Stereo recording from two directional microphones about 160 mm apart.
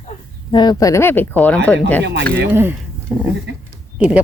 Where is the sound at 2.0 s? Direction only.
90° right.